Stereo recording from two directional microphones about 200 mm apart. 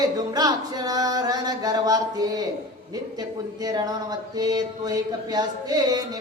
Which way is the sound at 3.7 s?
20° right (ahead or behind).